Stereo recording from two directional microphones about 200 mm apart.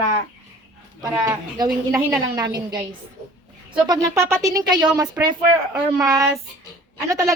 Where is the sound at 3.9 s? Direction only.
15° right (ahead or behind).